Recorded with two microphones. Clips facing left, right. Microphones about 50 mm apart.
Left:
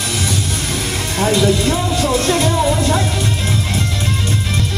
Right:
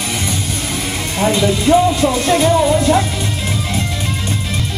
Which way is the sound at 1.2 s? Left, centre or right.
Centre.